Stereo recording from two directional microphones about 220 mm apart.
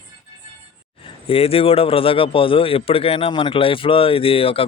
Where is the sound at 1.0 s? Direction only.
25° left (ahead or behind).